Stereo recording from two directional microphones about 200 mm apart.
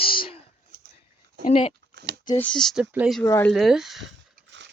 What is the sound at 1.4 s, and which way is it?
Speech, 35° left (ahead or behind).